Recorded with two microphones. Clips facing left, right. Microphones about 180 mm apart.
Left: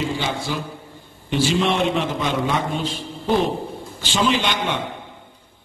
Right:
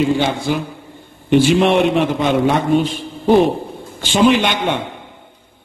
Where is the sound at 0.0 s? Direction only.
60° right (ahead or behind).